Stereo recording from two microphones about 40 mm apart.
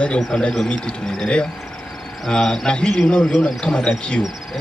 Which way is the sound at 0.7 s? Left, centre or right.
Left.